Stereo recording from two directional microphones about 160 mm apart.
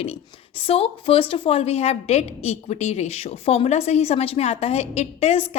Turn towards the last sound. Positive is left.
turn(degrees=40)  # may be behind; listen again after turning